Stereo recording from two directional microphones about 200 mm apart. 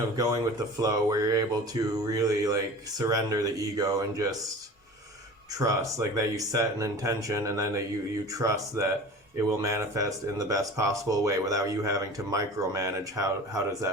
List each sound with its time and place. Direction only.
0.8 s speech: 15° right (ahead or behind)
5.5 s speech: 15° right (ahead or behind)